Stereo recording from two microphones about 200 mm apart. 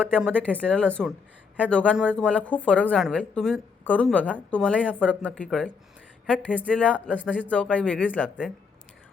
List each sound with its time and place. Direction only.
0.1 s a woman's voice: 5° left (ahead or behind)